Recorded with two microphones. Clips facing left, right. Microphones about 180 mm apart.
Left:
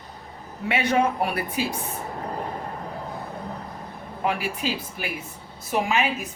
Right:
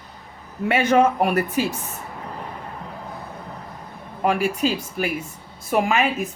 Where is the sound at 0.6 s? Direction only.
50° right (ahead or behind).